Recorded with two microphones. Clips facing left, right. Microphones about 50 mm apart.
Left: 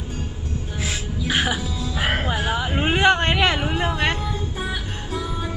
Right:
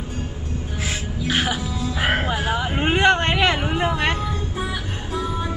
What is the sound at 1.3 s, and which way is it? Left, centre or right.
Music, centre.